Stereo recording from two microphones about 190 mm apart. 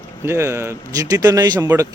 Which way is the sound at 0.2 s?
15° right (ahead or behind).